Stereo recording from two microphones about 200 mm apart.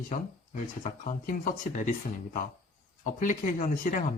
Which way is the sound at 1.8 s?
40° left (ahead or behind).